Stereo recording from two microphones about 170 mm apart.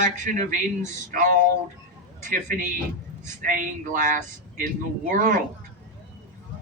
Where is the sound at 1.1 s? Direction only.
55° right (ahead or behind).